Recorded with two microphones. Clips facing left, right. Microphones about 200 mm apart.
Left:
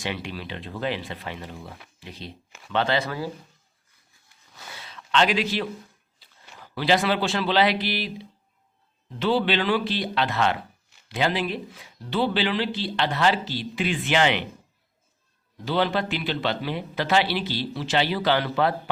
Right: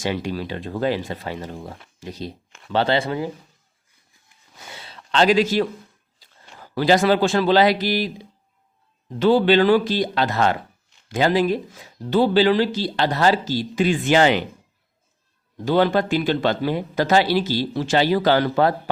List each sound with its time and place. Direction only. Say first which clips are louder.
0.0 s speech: right 7 dB; 40° right (ahead or behind)
2.7 s speech: right 4 dB; 30° right (ahead or behind)
4.7 s a sound: even; 30° right (ahead or behind)
6.7 s speech: right 6 dB; 45° right (ahead or behind)
15.6 s speech: right 6 dB; 50° right (ahead or behind)